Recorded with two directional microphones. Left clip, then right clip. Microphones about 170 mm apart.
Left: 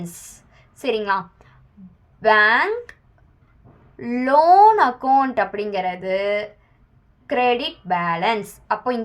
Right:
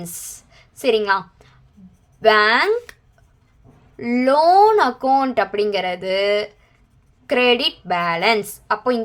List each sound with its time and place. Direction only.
0.0 s a sound: 40° right (ahead or behind)
2.2 s speech: 40° right (ahead or behind)
3.9 s a woman's voice: 40° right (ahead or behind)